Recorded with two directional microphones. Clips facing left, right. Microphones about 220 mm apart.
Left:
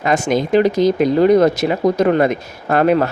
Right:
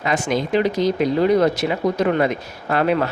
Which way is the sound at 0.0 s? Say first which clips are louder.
Left 4 dB; 45° left (ahead or behind).